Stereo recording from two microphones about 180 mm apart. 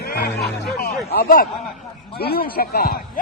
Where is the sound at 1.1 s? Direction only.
55° left (ahead or behind).